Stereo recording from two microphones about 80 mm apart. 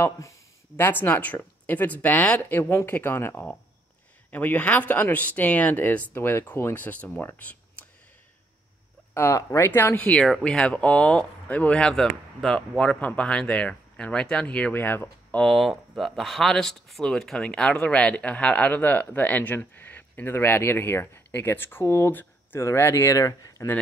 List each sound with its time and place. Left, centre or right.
0.0 s speech: left
0.7 s speech: left
2.6 s speech: left
9.1 s speech: left
10.0 s speech: centre; by 15.4 s left
15.4 s speech: centre; by 23.7 s left